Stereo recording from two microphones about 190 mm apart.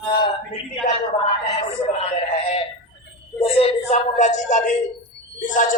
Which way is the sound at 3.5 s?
35° left (ahead or behind).